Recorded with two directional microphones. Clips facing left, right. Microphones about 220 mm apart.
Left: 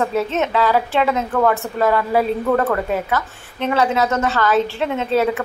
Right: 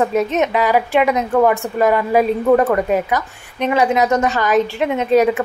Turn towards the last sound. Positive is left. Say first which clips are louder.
# right 4 dB
turn(degrees=-15)  # may be behind; listen again after turning